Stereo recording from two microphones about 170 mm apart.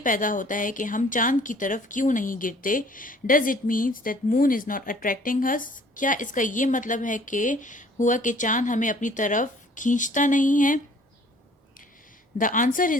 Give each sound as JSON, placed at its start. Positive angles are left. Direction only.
{"t": 0.0, "sound": "speech", "side_deg": 50}
{"t": 12.4, "sound": "speech", "side_deg": 50}